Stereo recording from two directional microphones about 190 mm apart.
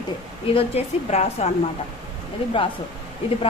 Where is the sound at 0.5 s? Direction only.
35° left (ahead or behind).